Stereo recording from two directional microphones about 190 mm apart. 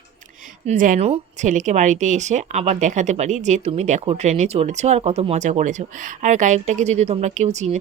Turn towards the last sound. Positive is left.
turn(degrees=-35)  # may be behind; listen again after turning